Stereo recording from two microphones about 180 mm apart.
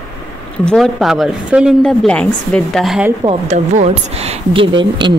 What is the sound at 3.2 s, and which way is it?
A woman's voice, 35° right (ahead or behind).